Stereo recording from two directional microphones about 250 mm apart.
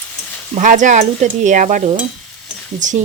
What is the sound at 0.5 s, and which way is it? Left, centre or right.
Speech, right.